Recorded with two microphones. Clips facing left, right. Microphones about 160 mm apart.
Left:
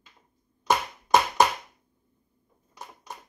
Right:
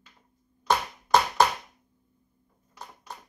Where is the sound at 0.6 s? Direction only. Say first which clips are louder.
Left 1 dB; 15° left (ahead or behind).